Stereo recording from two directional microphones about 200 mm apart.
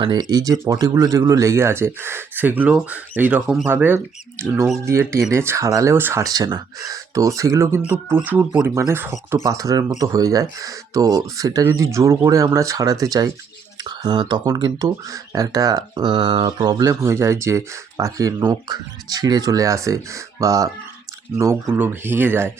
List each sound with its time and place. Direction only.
0.0 s speech: 20° right (ahead or behind)